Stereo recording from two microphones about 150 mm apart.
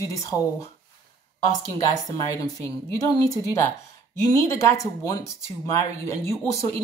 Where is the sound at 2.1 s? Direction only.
25° left (ahead or behind).